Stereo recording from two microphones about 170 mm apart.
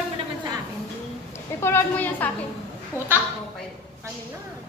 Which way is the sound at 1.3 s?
15° left (ahead or behind).